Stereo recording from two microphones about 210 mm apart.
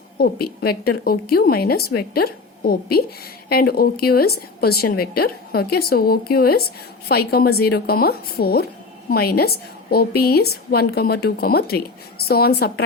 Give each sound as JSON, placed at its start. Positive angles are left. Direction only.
{"t": 0.2, "sound": "a woman's voice", "side_deg": 45}